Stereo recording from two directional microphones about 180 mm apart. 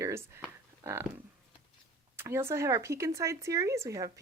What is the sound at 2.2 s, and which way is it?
Speech, 15° right (ahead or behind).